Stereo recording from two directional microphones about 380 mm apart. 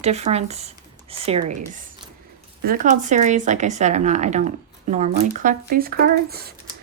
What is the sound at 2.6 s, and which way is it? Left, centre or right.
Speech, right.